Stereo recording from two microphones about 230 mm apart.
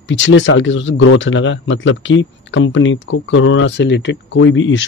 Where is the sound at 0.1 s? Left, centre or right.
Left.